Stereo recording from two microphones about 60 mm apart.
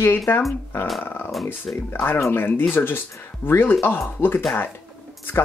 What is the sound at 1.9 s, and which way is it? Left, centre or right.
Speech, left.